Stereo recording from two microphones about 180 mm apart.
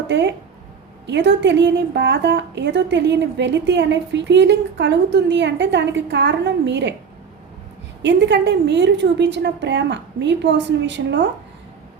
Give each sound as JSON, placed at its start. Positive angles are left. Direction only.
{"t": 0.1, "sound": "a woman's voice", "side_deg": -75}
{"t": 8.0, "sound": "a woman's voice", "side_deg": -80}